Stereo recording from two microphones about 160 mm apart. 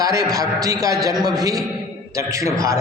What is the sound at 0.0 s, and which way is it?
Speech, 20° right (ahead or behind).